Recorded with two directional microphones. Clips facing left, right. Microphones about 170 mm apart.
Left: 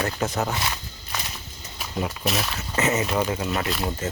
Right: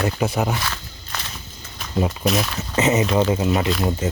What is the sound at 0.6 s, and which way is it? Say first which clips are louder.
Walk: right 1 dB; 15° left (ahead or behind).